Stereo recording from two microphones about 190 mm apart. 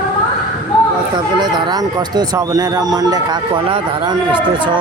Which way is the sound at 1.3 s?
20° right (ahead or behind).